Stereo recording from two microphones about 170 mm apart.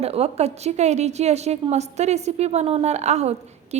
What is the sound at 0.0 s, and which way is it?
A woman's voice, 35° right (ahead or behind).